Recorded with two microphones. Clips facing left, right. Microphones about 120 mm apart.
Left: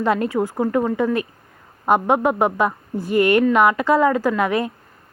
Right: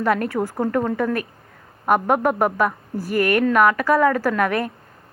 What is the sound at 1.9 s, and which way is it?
A woman's voice, 20° left (ahead or behind).